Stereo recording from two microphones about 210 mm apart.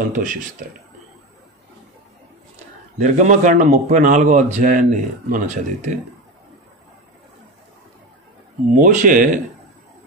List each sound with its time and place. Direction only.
0.1 s a man's voice: 40° right (ahead or behind)
3.0 s a man's voice: 35° right (ahead or behind)
8.6 s a man's voice: 35° right (ahead or behind)